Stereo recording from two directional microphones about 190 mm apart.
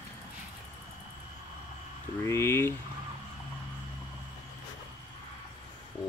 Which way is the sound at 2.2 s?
15° left (ahead or behind).